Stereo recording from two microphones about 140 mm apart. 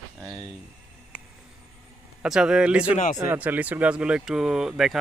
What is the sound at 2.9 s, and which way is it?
Speech, 60° left (ahead or behind).